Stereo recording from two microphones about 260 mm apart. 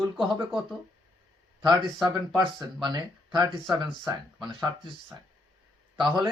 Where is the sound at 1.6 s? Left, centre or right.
Centre.